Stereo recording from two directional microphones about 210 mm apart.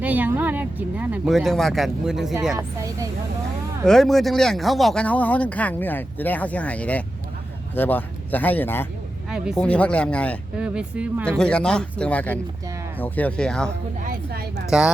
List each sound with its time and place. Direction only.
0.0 s speech: 10° right (ahead or behind)
3.8 s speech: centre (ahead or behind)
10.6 s speech: 5° right (ahead or behind)
14.0 s speech: 45° right (ahead or behind)
14.7 s speech: 5° right (ahead or behind)